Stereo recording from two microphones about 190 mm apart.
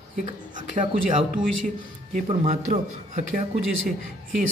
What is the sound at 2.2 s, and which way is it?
A man's voice, 35° right (ahead or behind).